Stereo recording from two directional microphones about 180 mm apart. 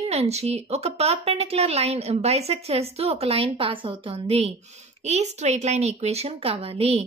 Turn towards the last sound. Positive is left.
turn(degrees=-35)  # may be behind; listen again after turning